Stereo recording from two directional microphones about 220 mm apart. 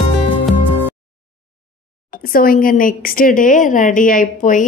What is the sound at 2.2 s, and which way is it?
A woman's voice, 40° left (ahead or behind).